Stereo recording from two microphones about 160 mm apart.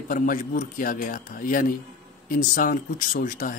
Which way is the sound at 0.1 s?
60° left (ahead or behind).